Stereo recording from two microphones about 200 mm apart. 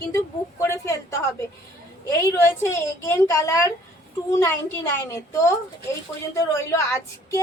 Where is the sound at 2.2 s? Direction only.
10° left (ahead or behind).